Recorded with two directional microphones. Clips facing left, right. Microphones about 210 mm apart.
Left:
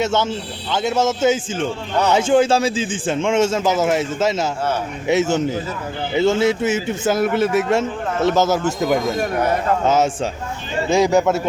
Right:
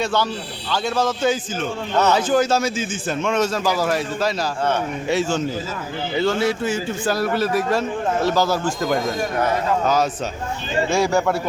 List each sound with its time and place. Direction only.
0.0 s a man's voice: 20° left (ahead or behind)